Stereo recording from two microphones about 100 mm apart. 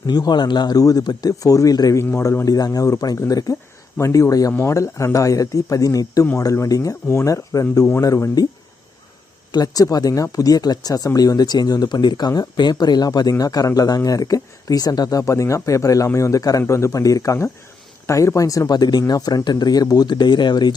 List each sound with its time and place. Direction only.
0.1 s speech: 45° left (ahead or behind)
2.0 s speech: 25° left (ahead or behind)
9.5 s speech: 40° left (ahead or behind)